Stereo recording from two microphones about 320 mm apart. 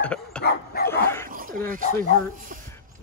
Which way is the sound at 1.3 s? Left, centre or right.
Right.